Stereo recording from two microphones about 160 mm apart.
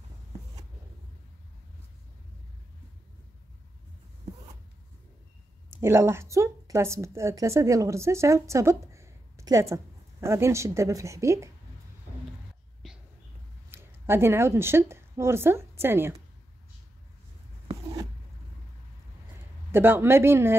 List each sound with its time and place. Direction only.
5.7 s a woman's voice: 15° right (ahead or behind)
13.7 s speech: 15° right (ahead or behind)
19.7 s speech: 15° right (ahead or behind)